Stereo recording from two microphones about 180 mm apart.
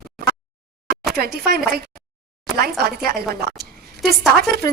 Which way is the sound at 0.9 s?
60° right (ahead or behind).